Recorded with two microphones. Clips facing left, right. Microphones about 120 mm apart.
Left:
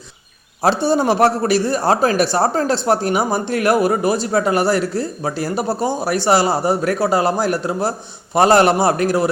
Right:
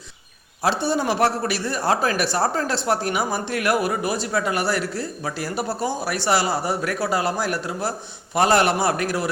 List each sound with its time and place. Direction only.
0.6 s a man's voice: 35° left (ahead or behind)